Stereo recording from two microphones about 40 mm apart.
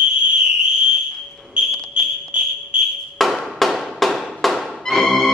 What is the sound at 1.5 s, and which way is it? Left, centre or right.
Smoke detector, right.